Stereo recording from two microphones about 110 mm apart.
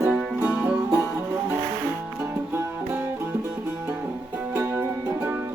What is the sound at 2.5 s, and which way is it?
Music, 20° right (ahead or behind).